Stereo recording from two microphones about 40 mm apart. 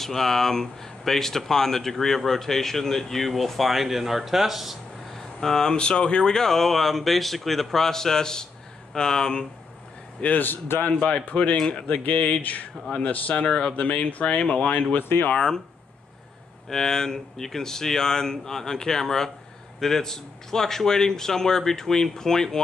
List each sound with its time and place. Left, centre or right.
0.0 s speech: centre
5.1 s speech: centre
10.4 s a man's voice: left
10.9 s speech: left
12.9 s speech: left
15.0 s a man's voice: left
15.3 s speech: centre
16.6 s speech: centre